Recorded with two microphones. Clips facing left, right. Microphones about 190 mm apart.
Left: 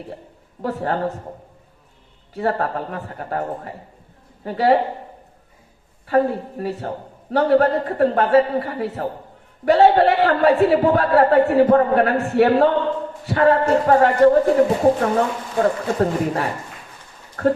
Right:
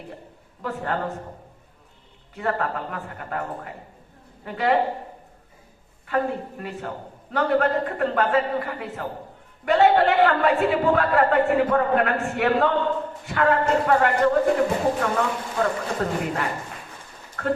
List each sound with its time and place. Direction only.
0.6 s speech: 35° left (ahead or behind)
2.3 s speech: 35° left (ahead or behind)
6.1 s speech: 35° left (ahead or behind)